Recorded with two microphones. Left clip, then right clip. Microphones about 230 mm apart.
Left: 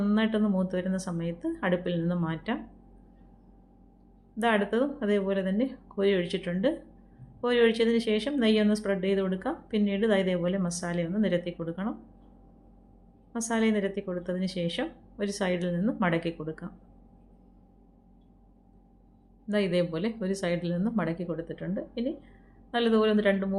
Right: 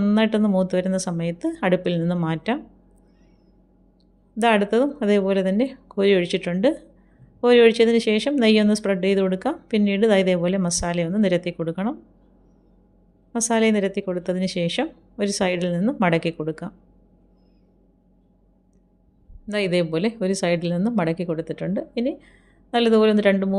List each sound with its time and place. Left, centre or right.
0.0 s speech: right
4.4 s speech: right
13.3 s speech: right
19.5 s speech: right